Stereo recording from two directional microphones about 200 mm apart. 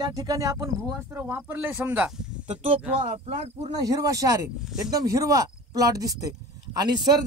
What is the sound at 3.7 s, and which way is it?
A man's voice, 15° right (ahead or behind).